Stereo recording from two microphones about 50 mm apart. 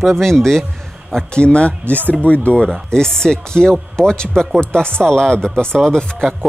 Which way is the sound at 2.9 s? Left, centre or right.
Centre.